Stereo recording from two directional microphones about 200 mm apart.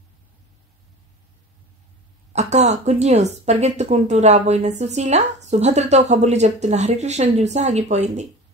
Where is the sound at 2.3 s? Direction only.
35° right (ahead or behind).